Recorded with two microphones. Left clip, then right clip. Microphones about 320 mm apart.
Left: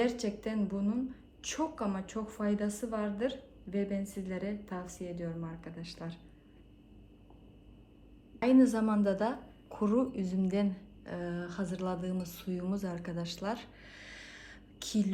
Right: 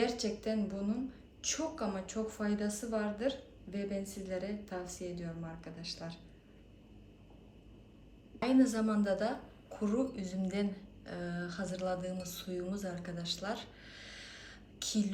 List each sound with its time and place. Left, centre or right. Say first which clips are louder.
0.0 s a woman's voice: left 2 dB; centre
8.4 s a woman's voice: left 4 dB; centre